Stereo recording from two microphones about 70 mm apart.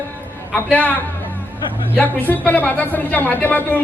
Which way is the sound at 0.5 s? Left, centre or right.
Left.